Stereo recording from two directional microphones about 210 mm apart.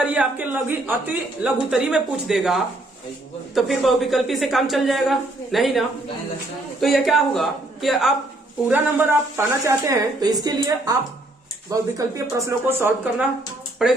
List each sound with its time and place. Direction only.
0.0 s a woman's voice: 5° right (ahead or behind)
6.8 s a woman's voice: centre (ahead or behind)
8.7 s a woman's voice: 10° right (ahead or behind)